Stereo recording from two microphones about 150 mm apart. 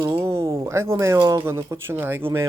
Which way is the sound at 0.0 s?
20° right (ahead or behind).